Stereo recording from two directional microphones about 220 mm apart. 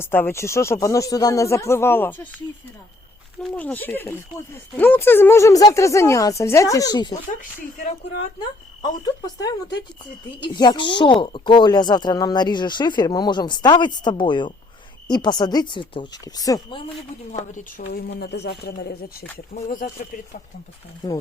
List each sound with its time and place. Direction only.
0.0 s speech: 10° left (ahead or behind)
3.5 s speech: 5° left (ahead or behind)
8.8 s speech: 15° left (ahead or behind)
17.3 s speech: 35° left (ahead or behind)